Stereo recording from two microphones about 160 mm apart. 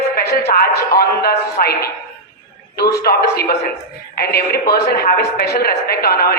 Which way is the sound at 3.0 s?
75° left (ahead or behind).